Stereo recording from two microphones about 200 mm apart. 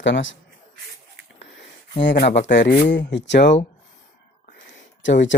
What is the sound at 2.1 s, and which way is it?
Speech, 40° left (ahead or behind).